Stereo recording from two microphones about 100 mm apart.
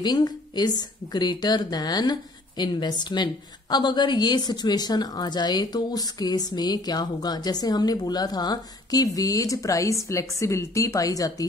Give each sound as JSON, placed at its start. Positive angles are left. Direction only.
{"t": 0.0, "sound": "a woman's voice", "side_deg": 45}